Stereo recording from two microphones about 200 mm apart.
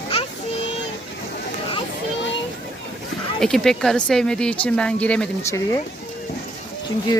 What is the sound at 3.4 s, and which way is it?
Speech, centre (ahead or behind).